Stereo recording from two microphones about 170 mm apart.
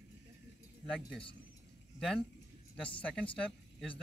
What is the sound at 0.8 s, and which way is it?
Speech, centre (ahead or behind).